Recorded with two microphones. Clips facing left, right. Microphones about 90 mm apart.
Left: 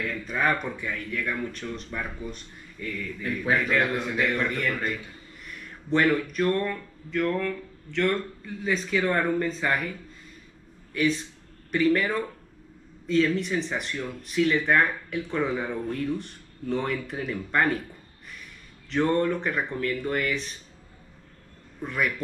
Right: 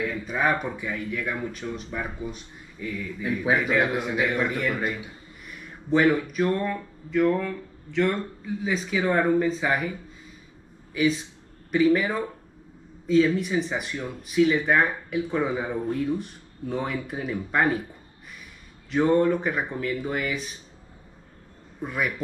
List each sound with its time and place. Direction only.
0.0 s speech: 5° right (ahead or behind)
18.9 s speech: 5° right (ahead or behind)
21.8 s speech: 5° right (ahead or behind)